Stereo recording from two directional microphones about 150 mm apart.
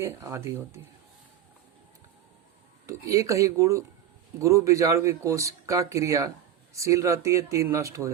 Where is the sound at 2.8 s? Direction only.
20° right (ahead or behind).